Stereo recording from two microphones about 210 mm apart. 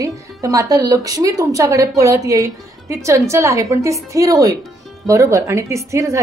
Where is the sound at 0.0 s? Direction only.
15° right (ahead or behind).